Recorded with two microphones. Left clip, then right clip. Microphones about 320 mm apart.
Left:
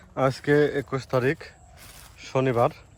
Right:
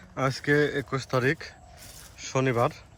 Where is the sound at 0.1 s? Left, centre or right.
Centre.